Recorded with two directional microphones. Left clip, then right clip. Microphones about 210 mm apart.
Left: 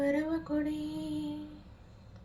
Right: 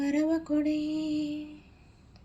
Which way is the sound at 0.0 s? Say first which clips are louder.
Right 3 dB; 35° right (ahead or behind).